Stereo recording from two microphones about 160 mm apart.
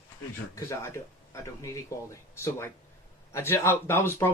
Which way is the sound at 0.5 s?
15° left (ahead or behind).